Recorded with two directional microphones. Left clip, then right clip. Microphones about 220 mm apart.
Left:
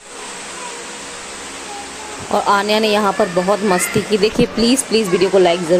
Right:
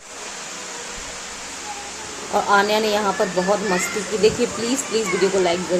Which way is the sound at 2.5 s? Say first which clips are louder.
Left 3 dB; 45° left (ahead or behind).